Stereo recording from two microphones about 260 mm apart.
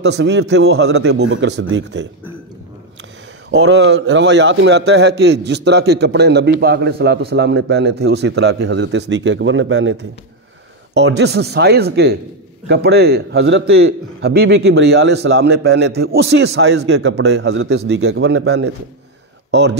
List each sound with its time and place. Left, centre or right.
0.0 s a man's voice: right
3.5 s a man's voice: right
11.0 s a man's voice: right